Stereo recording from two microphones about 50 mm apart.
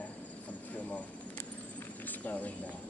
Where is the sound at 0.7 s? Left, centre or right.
Left.